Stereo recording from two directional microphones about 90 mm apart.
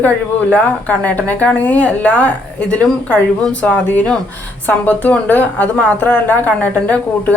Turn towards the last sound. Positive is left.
turn(degrees=15)  # may be behind; listen again after turning